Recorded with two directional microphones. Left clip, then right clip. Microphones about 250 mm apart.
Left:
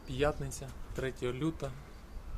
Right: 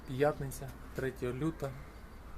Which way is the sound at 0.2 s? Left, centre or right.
Centre.